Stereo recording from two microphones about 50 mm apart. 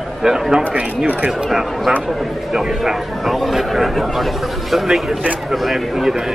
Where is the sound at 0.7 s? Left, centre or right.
Right.